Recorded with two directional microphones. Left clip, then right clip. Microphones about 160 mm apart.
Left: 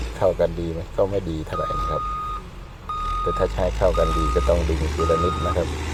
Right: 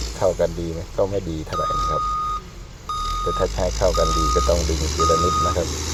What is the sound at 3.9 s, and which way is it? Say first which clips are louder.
Speech: right 2 dB; 20° right (ahead or behind).